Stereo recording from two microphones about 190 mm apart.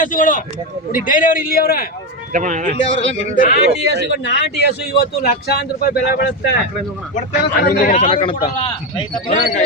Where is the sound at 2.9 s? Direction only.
45° left (ahead or behind).